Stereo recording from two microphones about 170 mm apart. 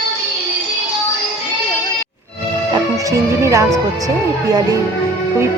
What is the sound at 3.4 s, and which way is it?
Speech, 15° right (ahead or behind).